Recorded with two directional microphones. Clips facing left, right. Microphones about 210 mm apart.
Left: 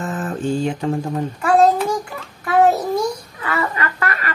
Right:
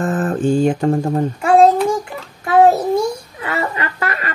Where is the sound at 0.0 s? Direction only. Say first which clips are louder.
Right 6 dB; 50° right (ahead or behind).